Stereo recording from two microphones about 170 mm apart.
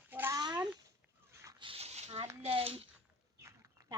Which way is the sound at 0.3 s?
25° right (ahead or behind).